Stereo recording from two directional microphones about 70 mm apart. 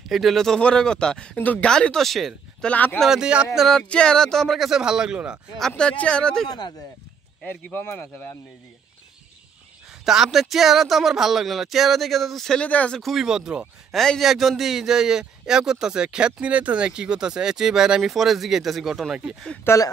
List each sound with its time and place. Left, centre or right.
0.1 s speech: centre; by 1.7 s left
1.7 s speech: centre
2.6 s speech: left
3.0 s speech: centre
3.5 s speech: centre
5.6 s speech: centre
7.4 s speech: left
10.0 s speech: centre
12.5 s speech: centre
13.0 s speech: centre
13.9 s speech: centre
19.7 s speech: left